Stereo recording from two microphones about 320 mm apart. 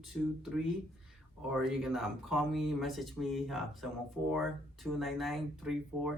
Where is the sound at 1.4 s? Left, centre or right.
Centre.